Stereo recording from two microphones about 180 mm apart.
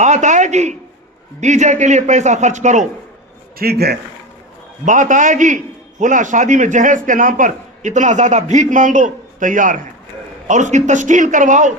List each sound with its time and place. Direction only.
0.0 s a man's voice: 40° right (ahead or behind)
3.6 s a man's voice: 60° right (ahead or behind)
4.9 s a man's voice: 45° right (ahead or behind)